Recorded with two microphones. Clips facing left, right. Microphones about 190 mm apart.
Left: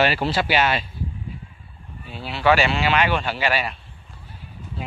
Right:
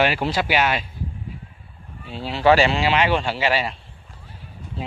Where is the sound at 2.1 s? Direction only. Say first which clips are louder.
Right 2 dB; 35° right (ahead or behind).